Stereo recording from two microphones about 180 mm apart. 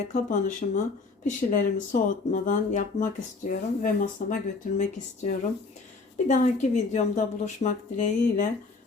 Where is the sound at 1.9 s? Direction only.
45° left (ahead or behind).